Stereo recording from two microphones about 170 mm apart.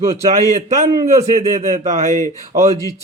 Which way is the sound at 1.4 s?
40° right (ahead or behind).